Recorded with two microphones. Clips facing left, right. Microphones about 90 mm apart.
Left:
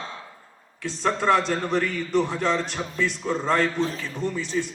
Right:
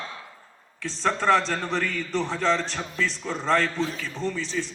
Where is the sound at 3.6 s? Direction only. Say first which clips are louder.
Left 2 dB; 35° left (ahead or behind).